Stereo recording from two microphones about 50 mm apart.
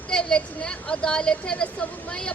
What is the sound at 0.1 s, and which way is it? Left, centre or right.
A woman's voice, centre.